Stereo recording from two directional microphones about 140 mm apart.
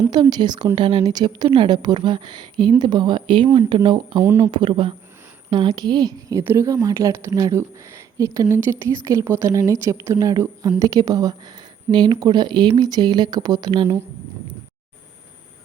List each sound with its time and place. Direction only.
0.1 s a woman's voice: 30° right (ahead or behind)